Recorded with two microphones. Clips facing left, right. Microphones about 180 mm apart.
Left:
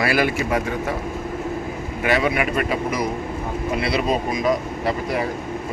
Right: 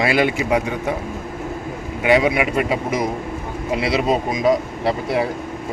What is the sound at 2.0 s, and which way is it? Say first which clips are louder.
Speech: right 4 dB; 20° right (ahead or behind).